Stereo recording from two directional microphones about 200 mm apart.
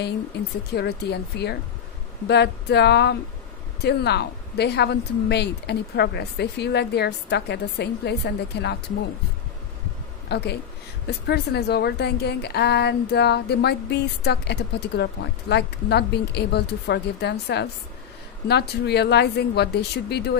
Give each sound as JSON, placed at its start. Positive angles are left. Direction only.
{"t": 0.7, "sound": "a woman's voice", "side_deg": 55}
{"t": 10.3, "sound": "a woman's voice", "side_deg": 55}